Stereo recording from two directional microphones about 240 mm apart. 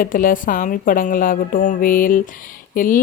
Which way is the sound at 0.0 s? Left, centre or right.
Left.